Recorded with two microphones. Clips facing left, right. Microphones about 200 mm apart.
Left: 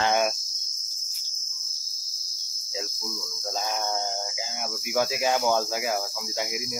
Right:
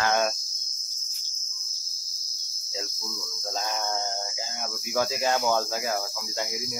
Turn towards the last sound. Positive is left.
turn(degrees=5)  # may be behind; listen again after turning